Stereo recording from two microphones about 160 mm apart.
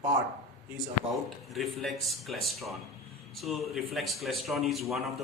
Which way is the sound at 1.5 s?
Centre (ahead or behind).